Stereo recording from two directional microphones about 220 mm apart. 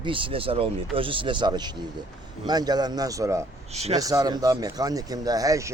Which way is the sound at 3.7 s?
30° right (ahead or behind).